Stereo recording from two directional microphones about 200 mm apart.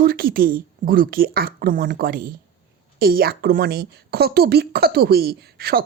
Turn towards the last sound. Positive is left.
turn(degrees=-50)  # may be behind; listen again after turning